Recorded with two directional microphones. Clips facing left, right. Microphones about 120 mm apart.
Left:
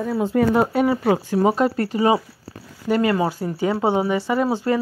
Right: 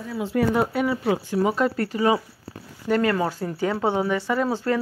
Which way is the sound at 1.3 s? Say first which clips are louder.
Left 2 dB; 30° left (ahead or behind).